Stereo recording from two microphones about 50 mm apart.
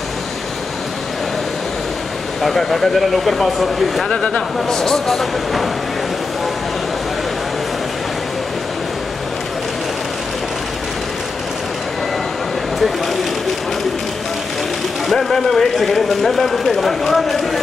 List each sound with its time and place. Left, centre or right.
2.4 s speech: centre
4.1 s speech: centre
4.6 s speech: centre
15.0 s speech: centre